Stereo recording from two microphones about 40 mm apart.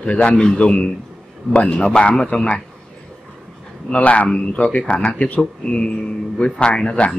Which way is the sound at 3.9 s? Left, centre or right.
Left.